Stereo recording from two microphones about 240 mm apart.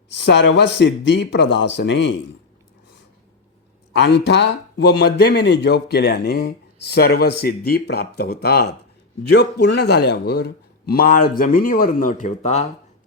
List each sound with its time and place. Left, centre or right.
0.1 s speech: left
3.9 s a man's voice: left